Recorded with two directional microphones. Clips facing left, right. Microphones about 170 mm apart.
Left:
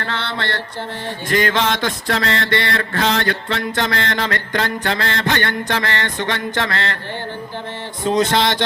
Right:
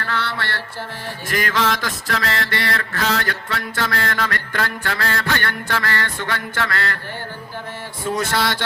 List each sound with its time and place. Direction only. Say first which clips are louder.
0.0 s mantra: left 1 dB; 25° left (ahead or behind)
8.0 s mantra: left 5 dB; 25° left (ahead or behind)